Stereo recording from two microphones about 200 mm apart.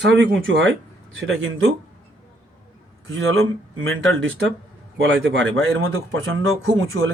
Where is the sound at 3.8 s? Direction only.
75° right (ahead or behind).